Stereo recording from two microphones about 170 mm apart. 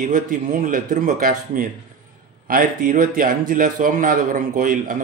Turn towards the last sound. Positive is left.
turn(degrees=-55)  # may be behind; listen again after turning